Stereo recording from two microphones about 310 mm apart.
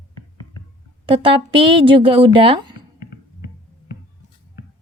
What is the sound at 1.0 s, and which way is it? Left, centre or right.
Speech, centre.